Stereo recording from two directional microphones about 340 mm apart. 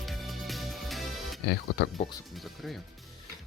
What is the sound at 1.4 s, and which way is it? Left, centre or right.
Speech, left.